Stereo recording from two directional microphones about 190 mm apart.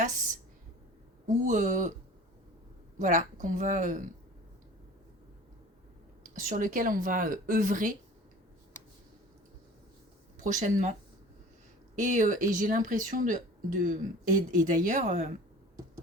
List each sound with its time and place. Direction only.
1.5 s speech: 40° right (ahead or behind)
3.0 s speech: 40° right (ahead or behind)
6.4 s speech: 45° right (ahead or behind)
10.4 s speech: 40° right (ahead or behind)
11.9 s speech: 40° right (ahead or behind)